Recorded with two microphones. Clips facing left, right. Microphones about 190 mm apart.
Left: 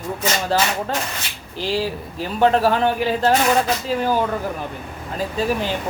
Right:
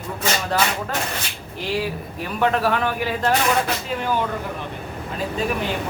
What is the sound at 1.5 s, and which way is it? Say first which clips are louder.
Speech: left 2 dB; 30° left (ahead or behind).